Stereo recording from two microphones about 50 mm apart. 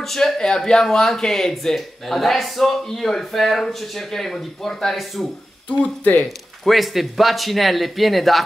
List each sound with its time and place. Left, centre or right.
0.0 s speech: centre
5.7 s speech: left
6.2 s speech: centre